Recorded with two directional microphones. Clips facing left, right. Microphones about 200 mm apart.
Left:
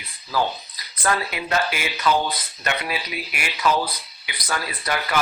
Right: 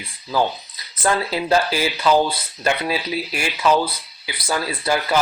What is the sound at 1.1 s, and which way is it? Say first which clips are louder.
Speech: right 6 dB; 30° right (ahead or behind).